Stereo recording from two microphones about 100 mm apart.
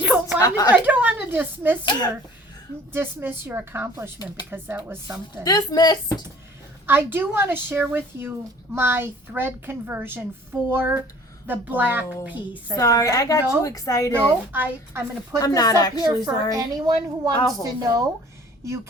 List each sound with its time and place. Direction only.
0.3 s a woman's voice: 35° left (ahead or behind)
0.7 s speech: 15° right (ahead or behind)
1.8 s a woman's voice: 50° left (ahead or behind)
2.9 s a woman's voice: 20° right (ahead or behind)
5.4 s a woman's voice: 40° left (ahead or behind)
6.8 s a woman's voice: 20° right (ahead or behind)
12.7 s a woman's voice: 35° left (ahead or behind)
14.1 s a woman's voice: 20° right (ahead or behind)
15.4 s a woman's voice: 40° left (ahead or behind)
16.2 s a woman's voice: 40° right (ahead or behind)